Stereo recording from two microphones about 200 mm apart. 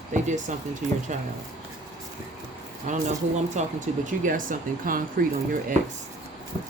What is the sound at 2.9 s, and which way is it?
Speech, 35° right (ahead or behind).